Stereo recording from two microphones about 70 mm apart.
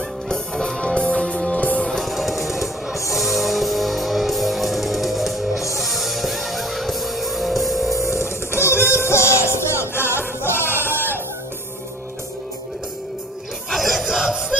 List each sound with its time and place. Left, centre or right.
0.3 s music: centre
2.0 s music: centre
8.6 s music: left
13.7 s crowd: centre